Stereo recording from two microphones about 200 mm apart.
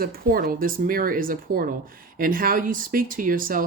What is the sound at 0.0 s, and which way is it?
Speech, 45° right (ahead or behind).